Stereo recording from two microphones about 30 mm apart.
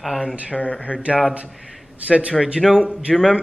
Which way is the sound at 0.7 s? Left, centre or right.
Left.